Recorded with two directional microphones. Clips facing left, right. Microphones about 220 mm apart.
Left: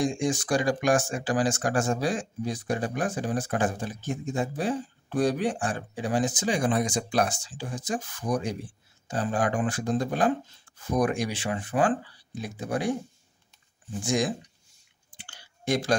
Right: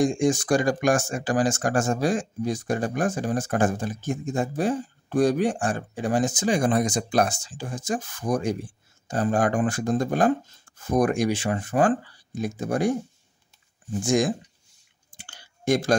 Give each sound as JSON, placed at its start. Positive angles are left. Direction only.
{"t": 0.0, "sound": "speech", "side_deg": -45}
{"t": 14.0, "sound": "speech", "side_deg": -50}
{"t": 15.1, "sound": "clicking", "side_deg": -45}